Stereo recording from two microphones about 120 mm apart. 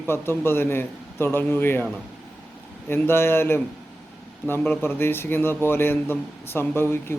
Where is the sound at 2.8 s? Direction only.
20° left (ahead or behind).